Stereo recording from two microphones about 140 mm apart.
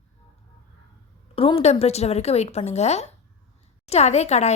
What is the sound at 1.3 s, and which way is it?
A woman's voice, 40° left (ahead or behind).